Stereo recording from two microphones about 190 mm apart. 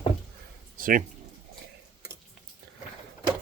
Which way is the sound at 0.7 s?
45° right (ahead or behind).